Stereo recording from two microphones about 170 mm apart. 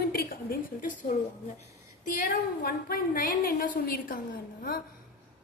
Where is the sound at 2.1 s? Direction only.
60° left (ahead or behind).